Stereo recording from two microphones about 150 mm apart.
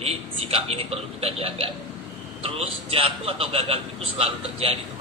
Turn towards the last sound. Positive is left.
turn(degrees=-40)  # may be behind; listen again after turning